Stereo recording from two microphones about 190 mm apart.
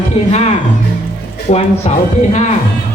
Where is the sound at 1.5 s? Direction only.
35° left (ahead or behind).